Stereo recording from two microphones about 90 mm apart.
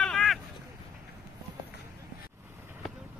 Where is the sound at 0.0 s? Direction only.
5° left (ahead or behind).